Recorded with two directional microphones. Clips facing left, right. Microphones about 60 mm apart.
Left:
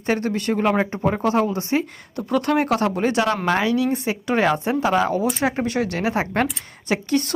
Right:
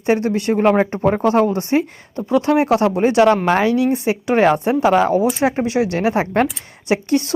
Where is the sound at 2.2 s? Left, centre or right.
Centre.